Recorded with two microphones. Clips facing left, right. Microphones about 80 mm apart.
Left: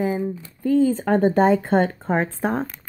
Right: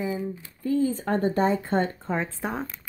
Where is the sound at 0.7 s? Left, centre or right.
Left.